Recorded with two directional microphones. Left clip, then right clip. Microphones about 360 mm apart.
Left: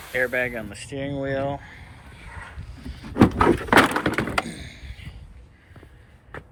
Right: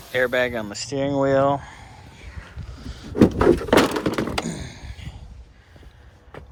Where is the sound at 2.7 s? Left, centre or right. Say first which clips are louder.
Right 1 dB; centre.